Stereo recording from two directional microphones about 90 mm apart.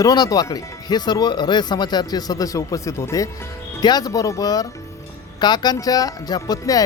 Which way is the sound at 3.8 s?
50° left (ahead or behind).